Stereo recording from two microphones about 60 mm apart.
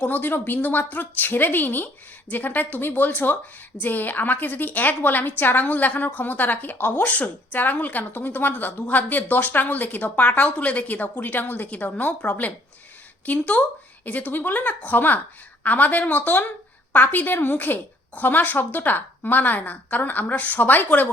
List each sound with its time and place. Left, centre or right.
0.0 s a woman's voice: left